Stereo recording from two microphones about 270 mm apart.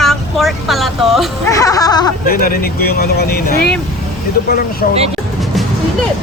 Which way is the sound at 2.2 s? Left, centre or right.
Left.